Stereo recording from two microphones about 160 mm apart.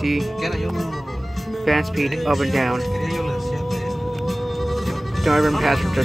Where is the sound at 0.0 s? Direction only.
Centre (ahead or behind).